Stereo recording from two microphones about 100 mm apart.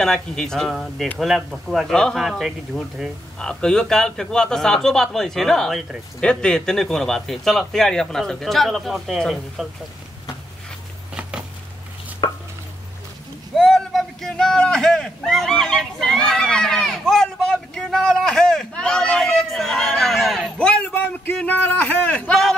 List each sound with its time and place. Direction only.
0.0 s speech: 5° left (ahead or behind)
12.2 s chopping: 50° left (ahead or behind)
13.6 s a sound: 5° left (ahead or behind)